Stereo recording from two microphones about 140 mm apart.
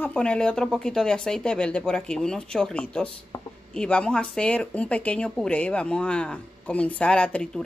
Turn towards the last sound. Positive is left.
turn(degrees=5)  # may be behind; listen again after turning